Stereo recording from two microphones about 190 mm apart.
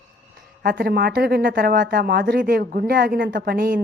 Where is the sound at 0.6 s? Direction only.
50° right (ahead or behind).